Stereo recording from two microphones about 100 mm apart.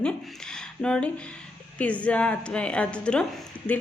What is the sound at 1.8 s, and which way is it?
A woman's voice, 15° left (ahead or behind).